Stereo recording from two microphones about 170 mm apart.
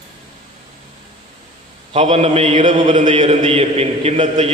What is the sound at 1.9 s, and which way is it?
A man's voice, 40° right (ahead or behind).